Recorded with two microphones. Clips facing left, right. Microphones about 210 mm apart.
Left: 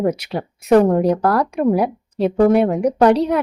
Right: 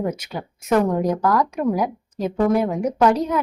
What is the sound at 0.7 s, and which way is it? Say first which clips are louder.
Speech: left 6 dB; 35° left (ahead or behind).